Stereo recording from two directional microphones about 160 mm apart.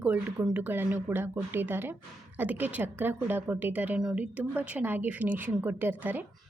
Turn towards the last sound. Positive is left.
turn(degrees=-10)  # may be behind; listen again after turning